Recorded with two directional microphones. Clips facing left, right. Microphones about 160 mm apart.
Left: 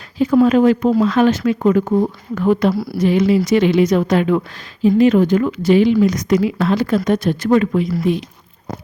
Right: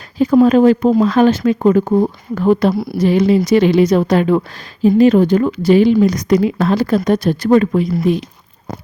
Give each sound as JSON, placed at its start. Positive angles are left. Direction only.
{"t": 0.4, "sound": "a woman's voice", "side_deg": -35}
{"t": 3.0, "sound": "a woman's voice", "side_deg": -35}